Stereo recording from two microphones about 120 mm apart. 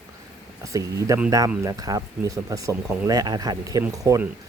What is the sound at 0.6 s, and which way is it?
Speech, 25° right (ahead or behind).